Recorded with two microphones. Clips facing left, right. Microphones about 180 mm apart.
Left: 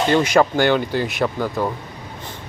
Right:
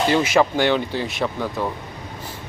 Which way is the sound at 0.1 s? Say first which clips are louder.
Left 4 dB; 5° right (ahead or behind).